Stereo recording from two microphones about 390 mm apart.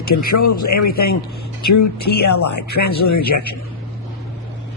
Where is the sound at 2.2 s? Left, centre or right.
Left.